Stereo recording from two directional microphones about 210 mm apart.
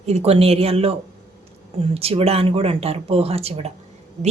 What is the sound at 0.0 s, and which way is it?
A woman's voice, 30° right (ahead or behind).